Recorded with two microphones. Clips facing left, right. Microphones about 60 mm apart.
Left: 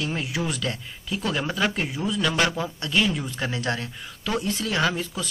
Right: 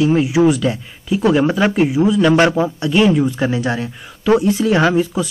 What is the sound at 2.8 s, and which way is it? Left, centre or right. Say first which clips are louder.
Speech: right 10 dB; centre.